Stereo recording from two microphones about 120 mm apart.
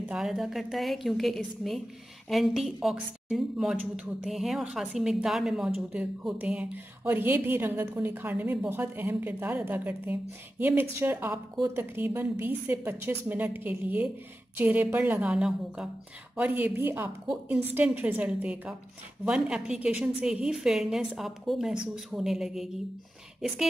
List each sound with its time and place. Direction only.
0.1 s a woman's voice: 5° right (ahead or behind)
3.7 s a woman's voice: 15° right (ahead or behind)
4.2 s a woman's voice: centre (ahead or behind)